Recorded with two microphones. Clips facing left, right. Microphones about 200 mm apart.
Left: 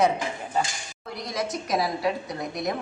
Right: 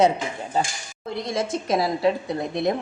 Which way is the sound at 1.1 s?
25° right (ahead or behind).